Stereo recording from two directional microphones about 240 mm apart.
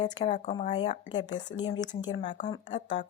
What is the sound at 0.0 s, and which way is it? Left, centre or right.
Speech, centre.